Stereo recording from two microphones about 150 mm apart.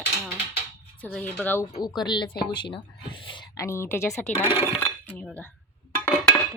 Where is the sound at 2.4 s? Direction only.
30° left (ahead or behind).